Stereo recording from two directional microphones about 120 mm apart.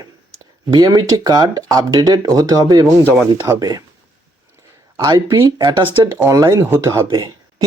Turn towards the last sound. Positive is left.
turn(degrees=-25)  # may be behind; listen again after turning